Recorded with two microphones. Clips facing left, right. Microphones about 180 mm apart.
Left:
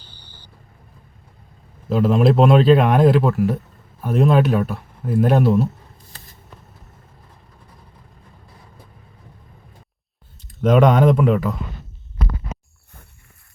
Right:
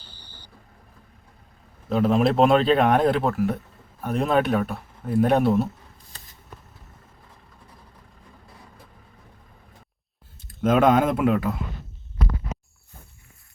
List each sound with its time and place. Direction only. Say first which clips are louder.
1.9 s speech: left 3 dB; centre (ahead or behind)
10.6 s speech: left 3 dB; 5° right (ahead or behind)